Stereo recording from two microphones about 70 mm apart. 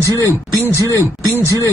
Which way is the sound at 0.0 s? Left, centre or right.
Left.